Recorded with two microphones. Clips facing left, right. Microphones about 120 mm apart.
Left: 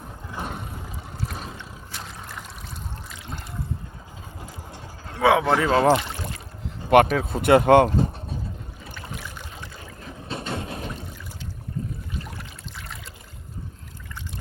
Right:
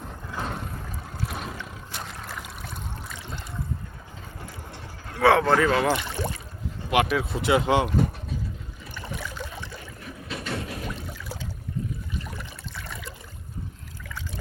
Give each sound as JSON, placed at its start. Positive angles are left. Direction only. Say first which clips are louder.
{"t": 0.3, "sound": "vehicle", "louder": "right 1 dB", "side_deg": 15}
{"t": 1.4, "sound": "boat", "louder": "right 2 dB", "side_deg": 30}
{"t": 5.2, "sound": "speech", "louder": "even", "side_deg": 10}
{"t": 5.5, "sound": "speech", "louder": "left 3 dB", "side_deg": 30}
{"t": 6.9, "sound": "speech", "louder": "left 6 dB", "side_deg": 45}
{"t": 7.9, "sound": "vehicle", "louder": "left 1 dB", "side_deg": 30}
{"t": 10.0, "sound": "a sound", "louder": "left 3 dB", "side_deg": 30}